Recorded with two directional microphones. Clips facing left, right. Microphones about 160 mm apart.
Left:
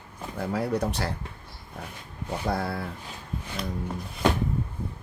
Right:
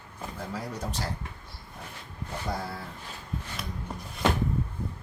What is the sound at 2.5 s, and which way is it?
Speech, 65° left (ahead or behind).